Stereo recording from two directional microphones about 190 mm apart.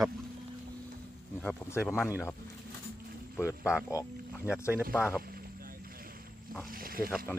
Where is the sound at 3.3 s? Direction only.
15° left (ahead or behind).